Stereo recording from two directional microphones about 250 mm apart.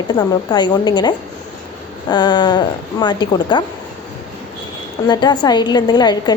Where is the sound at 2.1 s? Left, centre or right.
Centre.